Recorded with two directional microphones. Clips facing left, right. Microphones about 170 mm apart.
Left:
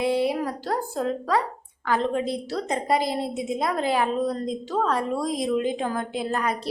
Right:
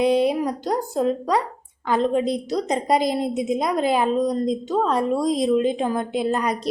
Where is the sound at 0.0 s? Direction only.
20° right (ahead or behind).